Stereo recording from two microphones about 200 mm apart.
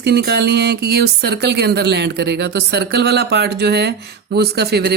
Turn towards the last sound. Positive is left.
turn(degrees=-55)  # may be behind; listen again after turning